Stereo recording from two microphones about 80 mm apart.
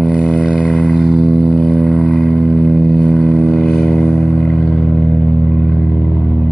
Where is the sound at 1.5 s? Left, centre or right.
Centre.